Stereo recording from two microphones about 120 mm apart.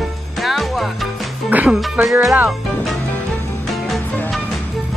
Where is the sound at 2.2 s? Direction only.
10° right (ahead or behind).